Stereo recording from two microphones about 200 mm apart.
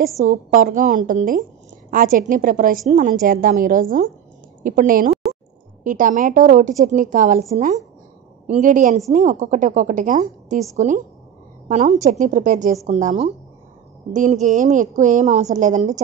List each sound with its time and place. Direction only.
0.5 s a woman's voice: 45° right (ahead or behind)
11.7 s a woman's voice: 35° right (ahead or behind)